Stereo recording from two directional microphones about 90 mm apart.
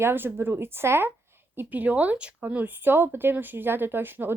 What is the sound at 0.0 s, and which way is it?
Speech, 25° right (ahead or behind).